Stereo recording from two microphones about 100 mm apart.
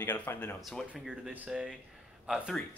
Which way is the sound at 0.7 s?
Centre (ahead or behind).